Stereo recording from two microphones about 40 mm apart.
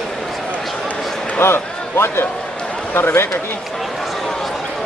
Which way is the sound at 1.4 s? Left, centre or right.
Left.